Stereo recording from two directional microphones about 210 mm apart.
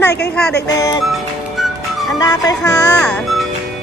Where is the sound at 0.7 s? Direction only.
15° left (ahead or behind).